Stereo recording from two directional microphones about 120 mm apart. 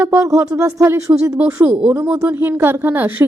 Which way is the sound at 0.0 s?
25° right (ahead or behind).